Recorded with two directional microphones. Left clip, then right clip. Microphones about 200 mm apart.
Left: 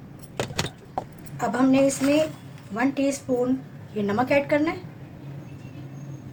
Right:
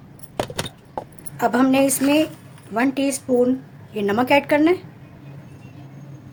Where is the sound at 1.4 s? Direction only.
60° right (ahead or behind).